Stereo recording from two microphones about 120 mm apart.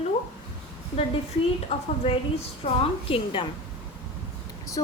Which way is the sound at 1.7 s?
60° left (ahead or behind).